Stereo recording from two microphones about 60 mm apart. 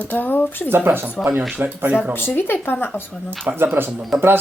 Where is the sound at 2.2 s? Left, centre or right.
Left.